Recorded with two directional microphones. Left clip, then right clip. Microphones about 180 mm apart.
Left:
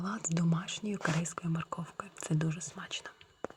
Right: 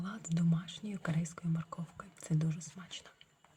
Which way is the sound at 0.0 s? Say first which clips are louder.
Left 4 dB; 30° left (ahead or behind).